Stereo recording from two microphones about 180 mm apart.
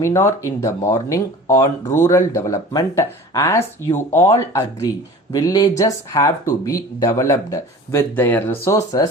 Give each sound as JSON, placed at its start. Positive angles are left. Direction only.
{"t": 0.0, "sound": "speech", "side_deg": 15}